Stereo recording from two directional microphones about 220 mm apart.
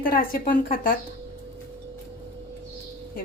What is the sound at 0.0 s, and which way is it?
Speech, 40° left (ahead or behind).